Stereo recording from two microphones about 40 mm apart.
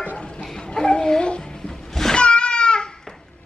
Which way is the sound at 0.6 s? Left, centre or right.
Centre.